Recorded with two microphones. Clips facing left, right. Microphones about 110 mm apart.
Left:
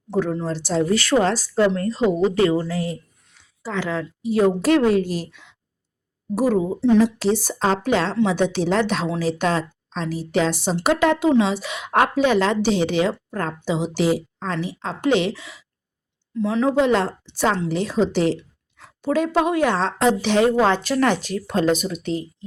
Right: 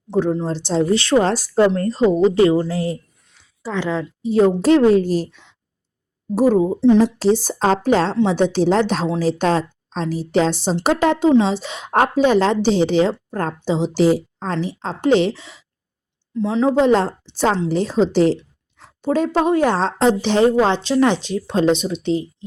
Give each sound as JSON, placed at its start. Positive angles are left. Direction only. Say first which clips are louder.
{"t": 0.1, "sound": "a woman's voice", "louder": "right 3 dB", "side_deg": -20}
{"t": 3.6, "sound": "a woman's voice", "louder": "right 3 dB", "side_deg": -20}
{"t": 16.8, "sound": "a woman's voice", "louder": "right 4 dB", "side_deg": -35}